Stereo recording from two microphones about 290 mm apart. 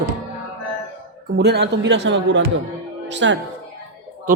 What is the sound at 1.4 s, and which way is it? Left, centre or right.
A man's voice, right.